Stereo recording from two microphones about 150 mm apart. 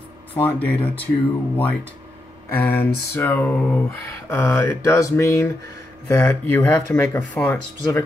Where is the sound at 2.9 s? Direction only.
90° left.